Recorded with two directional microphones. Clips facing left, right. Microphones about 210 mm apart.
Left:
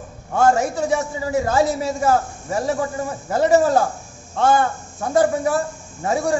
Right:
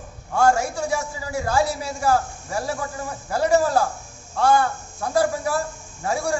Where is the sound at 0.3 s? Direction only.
20° left (ahead or behind).